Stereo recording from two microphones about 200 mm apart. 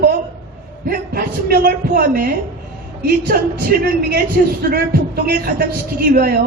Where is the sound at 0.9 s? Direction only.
50° right (ahead or behind).